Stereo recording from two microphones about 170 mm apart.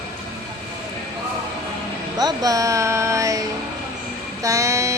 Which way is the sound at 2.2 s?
20° right (ahead or behind).